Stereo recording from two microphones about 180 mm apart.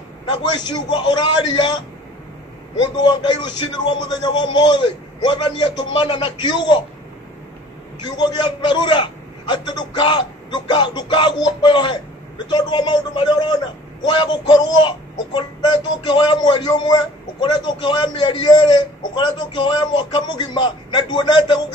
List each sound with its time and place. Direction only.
0.3 s speech: 25° left (ahead or behind)
2.8 s speech: 25° left (ahead or behind)
8.0 s speech: 25° left (ahead or behind)